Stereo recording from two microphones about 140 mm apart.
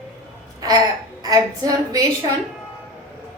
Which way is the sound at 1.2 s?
25° right (ahead or behind).